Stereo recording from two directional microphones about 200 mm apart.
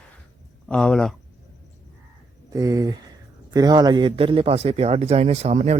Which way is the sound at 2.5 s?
15° right (ahead or behind).